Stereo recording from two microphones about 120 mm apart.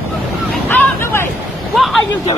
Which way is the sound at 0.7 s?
15° left (ahead or behind).